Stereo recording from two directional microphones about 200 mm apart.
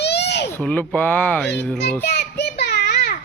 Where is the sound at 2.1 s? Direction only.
55° left (ahead or behind).